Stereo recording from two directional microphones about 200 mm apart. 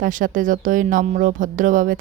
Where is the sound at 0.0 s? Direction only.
40° right (ahead or behind).